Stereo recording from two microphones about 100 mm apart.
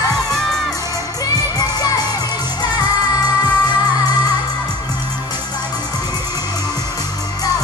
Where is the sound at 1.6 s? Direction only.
45° left (ahead or behind).